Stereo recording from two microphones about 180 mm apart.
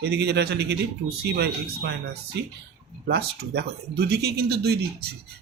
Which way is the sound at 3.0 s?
65° right (ahead or behind).